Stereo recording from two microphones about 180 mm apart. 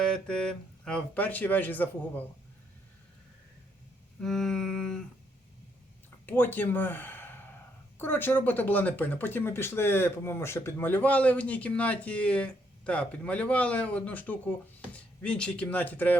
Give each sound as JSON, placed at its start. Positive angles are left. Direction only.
{"t": 0.1, "sound": "speech", "side_deg": 5}
{"t": 4.2, "sound": "a sound", "side_deg": 0}
{"t": 6.2, "sound": "speech", "side_deg": 10}